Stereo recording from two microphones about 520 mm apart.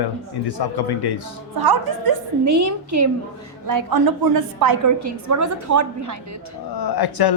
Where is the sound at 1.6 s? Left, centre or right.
Right.